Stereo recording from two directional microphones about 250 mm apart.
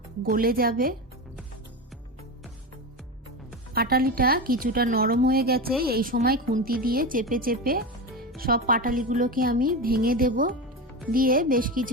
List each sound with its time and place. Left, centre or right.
0.2 s speech: right
3.8 s speech: right